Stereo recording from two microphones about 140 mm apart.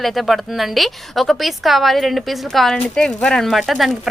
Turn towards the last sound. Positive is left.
turn(degrees=0)  # may be behind; listen again after turning